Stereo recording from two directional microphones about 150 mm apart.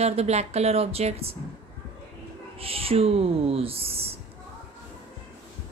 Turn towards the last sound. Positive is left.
turn(degrees=-40)  # may be behind; listen again after turning